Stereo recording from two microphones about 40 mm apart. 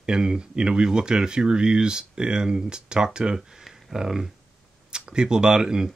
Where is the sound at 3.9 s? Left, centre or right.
Centre.